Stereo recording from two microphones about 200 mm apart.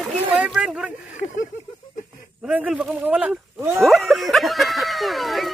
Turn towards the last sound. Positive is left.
turn(degrees=0)  # may be behind; listen again after turning